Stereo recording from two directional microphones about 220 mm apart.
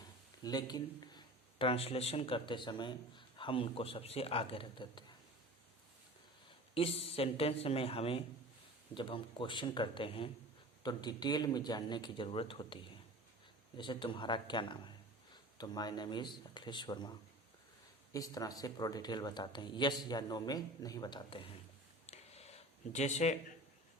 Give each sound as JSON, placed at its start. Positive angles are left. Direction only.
{"t": 0.4, "sound": "speech", "side_deg": 20}
{"t": 6.7, "sound": "speech", "side_deg": 25}
{"t": 22.0, "sound": "a sound", "side_deg": 30}